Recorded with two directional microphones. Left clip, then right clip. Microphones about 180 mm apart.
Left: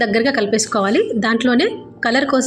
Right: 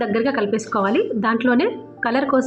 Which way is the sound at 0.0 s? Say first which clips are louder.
Left 4 dB; 20° left (ahead or behind).